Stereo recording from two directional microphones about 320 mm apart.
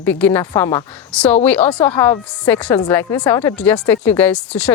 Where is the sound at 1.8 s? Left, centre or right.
Centre.